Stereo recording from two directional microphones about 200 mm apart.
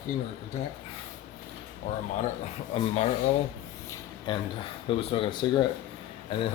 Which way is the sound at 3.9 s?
25° left (ahead or behind).